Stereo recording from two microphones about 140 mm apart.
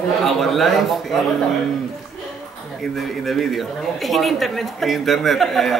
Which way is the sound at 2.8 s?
Centre (ahead or behind).